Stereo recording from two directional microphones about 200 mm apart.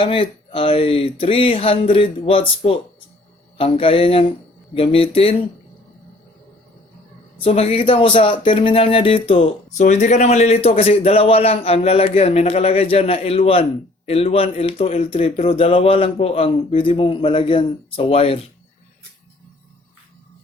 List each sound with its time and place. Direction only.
0.0 s speech: 25° left (ahead or behind)
7.3 s speech: 30° left (ahead or behind)